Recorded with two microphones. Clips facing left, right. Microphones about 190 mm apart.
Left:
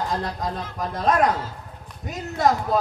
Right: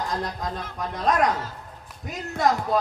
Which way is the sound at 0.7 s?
Centre (ahead or behind).